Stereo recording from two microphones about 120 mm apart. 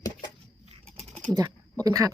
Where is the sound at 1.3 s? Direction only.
35° right (ahead or behind).